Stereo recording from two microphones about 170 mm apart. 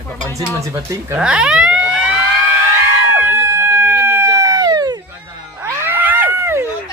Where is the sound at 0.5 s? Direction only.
20° right (ahead or behind).